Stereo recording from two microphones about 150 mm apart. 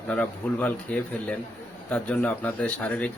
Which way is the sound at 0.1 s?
10° left (ahead or behind).